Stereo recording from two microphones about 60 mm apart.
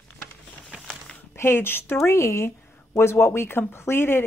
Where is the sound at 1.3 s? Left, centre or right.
Left.